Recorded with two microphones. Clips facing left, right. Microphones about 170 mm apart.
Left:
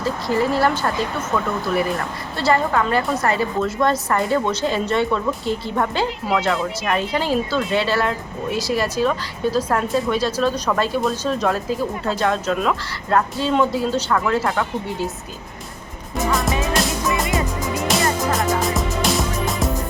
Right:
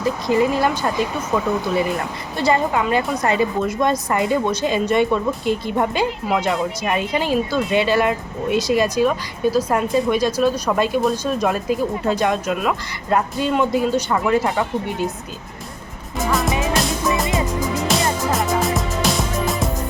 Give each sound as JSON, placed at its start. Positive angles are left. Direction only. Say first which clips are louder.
{"t": 0.0, "sound": "speech", "louder": "right 3 dB", "side_deg": -15}
{"t": 16.3, "sound": "music", "louder": "right 2 dB", "side_deg": 0}
{"t": 18.3, "sound": "music", "louder": "right 1 dB", "side_deg": 0}